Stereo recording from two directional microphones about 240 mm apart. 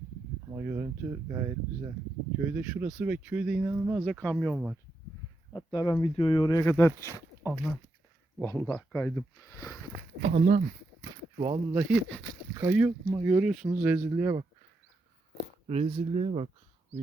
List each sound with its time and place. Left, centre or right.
0.5 s speech: centre
4.0 s speech: centre
5.5 s speech: centre
10.2 s speech: right
11.0 s a sound: centre
12.5 s speech: centre
15.6 s speech: right